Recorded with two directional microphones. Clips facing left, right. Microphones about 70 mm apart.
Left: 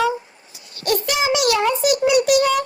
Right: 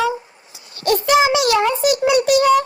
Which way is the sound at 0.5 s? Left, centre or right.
Right.